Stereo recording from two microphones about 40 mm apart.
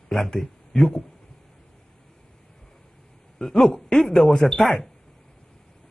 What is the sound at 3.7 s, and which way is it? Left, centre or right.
Speech, left.